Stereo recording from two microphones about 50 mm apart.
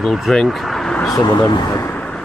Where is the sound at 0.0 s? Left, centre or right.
Centre.